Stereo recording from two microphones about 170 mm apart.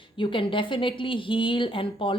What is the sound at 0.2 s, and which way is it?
A woman's voice, 30° left (ahead or behind).